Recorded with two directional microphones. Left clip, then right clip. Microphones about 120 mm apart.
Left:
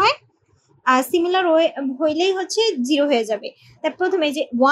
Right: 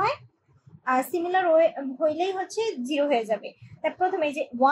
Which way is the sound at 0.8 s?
20° left (ahead or behind).